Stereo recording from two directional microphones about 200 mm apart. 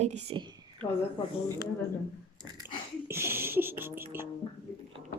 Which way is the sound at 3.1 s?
10° right (ahead or behind).